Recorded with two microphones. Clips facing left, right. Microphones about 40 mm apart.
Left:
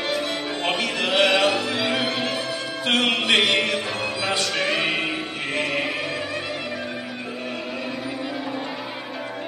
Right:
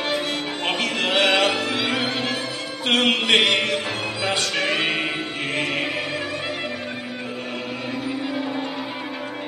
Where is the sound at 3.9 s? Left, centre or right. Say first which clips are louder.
Even; right.